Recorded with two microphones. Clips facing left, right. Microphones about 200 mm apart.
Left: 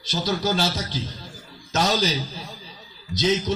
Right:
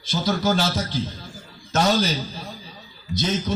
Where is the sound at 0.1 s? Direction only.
55° right (ahead or behind).